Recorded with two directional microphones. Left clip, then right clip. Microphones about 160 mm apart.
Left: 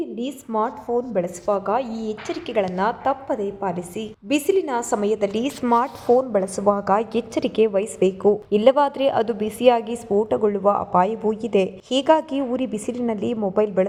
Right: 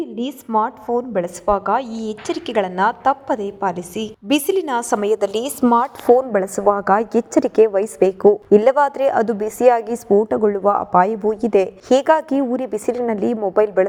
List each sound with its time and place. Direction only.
0.0 s a woman's voice: 20° right (ahead or behind); by 5.5 s 55° right (ahead or behind)
5.6 s a woman's voice: 45° right (ahead or behind)